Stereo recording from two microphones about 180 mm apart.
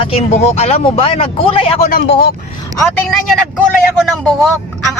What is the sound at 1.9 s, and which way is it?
Speech, 60° left (ahead or behind).